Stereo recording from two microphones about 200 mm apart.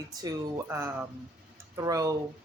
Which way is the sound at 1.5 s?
15° right (ahead or behind).